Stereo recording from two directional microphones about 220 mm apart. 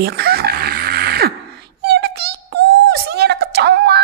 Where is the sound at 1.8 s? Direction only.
45° right (ahead or behind).